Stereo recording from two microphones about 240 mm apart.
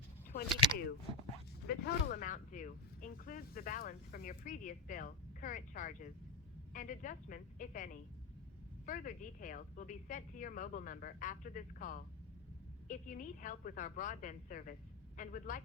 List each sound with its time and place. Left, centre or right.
1.6 s speech: left